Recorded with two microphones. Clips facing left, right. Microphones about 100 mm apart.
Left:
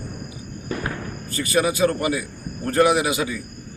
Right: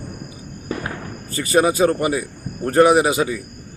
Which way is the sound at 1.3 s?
35° right (ahead or behind).